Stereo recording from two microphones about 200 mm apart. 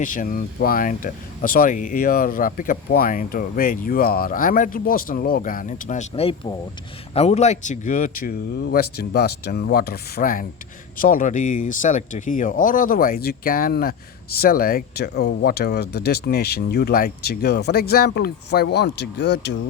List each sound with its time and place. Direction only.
0.0 s speech: 40° left (ahead or behind); by 19.5 s 60° left (ahead or behind)